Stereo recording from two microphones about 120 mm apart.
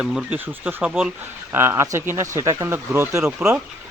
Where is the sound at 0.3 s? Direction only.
15° right (ahead or behind).